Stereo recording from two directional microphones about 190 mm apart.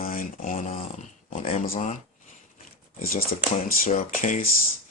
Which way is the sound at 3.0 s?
50° left (ahead or behind).